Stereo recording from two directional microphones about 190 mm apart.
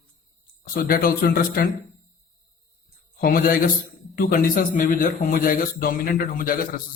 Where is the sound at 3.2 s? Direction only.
50° left (ahead or behind).